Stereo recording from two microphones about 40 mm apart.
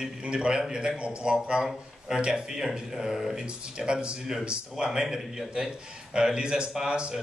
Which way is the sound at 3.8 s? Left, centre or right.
Right.